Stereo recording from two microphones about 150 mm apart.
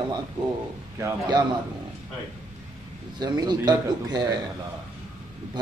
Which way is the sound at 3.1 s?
30° right (ahead or behind).